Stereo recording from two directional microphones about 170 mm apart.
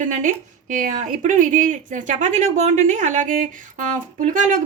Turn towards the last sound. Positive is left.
turn(degrees=-45)  # may be behind; listen again after turning